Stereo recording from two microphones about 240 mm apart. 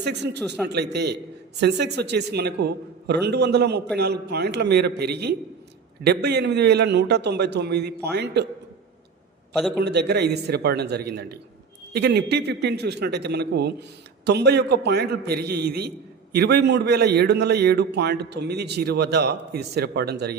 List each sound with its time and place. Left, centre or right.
0.0 s speech: right
0.6 s a man's voice: centre
1.5 s a man's voice: right
9.7 s a man's voice: right